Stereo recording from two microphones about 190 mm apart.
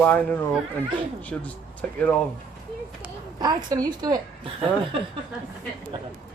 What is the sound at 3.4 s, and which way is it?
Speech, 20° right (ahead or behind).